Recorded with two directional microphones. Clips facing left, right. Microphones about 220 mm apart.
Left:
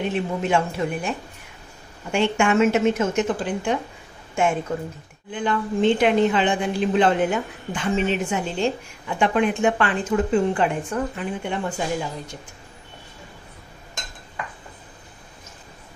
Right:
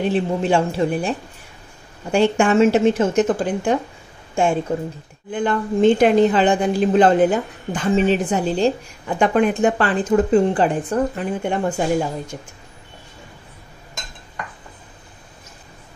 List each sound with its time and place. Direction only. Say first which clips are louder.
0.0 s a woman's voice: right 5 dB; 30° right (ahead or behind)
4.7 s speech: right 4 dB; 30° right (ahead or behind)
5.3 s a woman's voice: right 4 dB; 45° right (ahead or behind)